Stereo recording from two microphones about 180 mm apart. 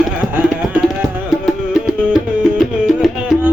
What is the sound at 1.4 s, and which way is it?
Music, 5° right (ahead or behind).